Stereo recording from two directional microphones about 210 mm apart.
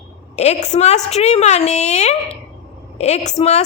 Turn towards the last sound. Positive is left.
turn(degrees=30)  # may be behind; listen again after turning